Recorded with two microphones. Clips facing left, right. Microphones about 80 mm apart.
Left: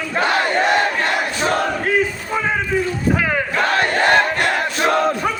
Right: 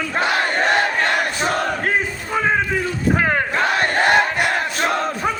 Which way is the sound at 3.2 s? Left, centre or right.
Right.